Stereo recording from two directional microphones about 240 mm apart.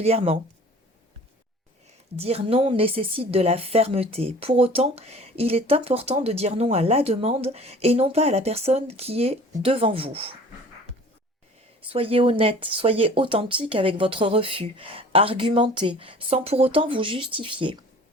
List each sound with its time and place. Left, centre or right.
0.0 s speech: right
2.1 s speech: right
11.9 s speech: right